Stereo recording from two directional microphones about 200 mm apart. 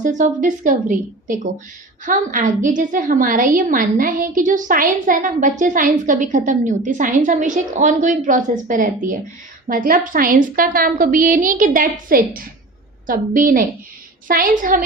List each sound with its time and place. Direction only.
0.0 s a woman's voice: 40° right (ahead or behind)